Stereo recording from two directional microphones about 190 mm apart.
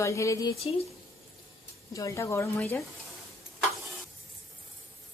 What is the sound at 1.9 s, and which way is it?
Speech, 15° left (ahead or behind).